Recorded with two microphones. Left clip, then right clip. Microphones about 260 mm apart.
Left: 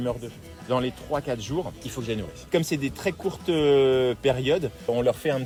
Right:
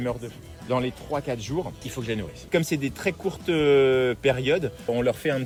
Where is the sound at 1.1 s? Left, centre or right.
Left.